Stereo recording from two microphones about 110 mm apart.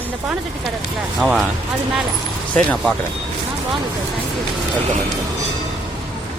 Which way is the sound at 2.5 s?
10° left (ahead or behind).